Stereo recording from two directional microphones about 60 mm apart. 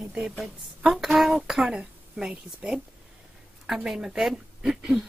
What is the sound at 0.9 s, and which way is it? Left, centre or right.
Speech, centre.